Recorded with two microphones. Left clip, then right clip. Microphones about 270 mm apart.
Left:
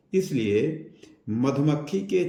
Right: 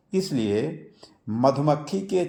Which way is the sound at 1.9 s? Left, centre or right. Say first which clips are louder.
Even; right.